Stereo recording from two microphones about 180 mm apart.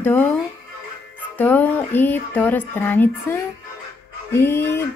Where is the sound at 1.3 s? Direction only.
10° left (ahead or behind).